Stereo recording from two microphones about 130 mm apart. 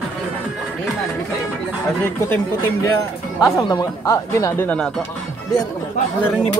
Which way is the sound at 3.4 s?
30° left (ahead or behind).